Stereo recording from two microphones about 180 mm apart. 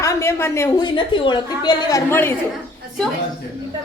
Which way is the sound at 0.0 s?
15° left (ahead or behind).